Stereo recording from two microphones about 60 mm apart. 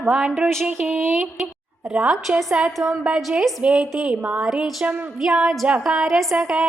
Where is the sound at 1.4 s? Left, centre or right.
Centre.